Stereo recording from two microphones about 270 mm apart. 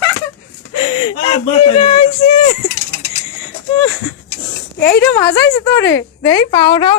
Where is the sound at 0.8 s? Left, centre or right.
Left.